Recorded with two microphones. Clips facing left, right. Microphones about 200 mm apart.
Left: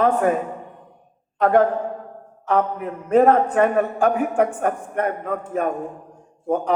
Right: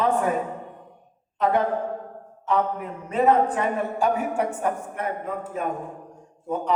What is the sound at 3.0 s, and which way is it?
Speech, 55° left (ahead or behind).